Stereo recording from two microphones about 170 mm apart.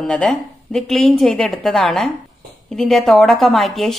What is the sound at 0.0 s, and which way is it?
A woman's voice, 5° left (ahead or behind).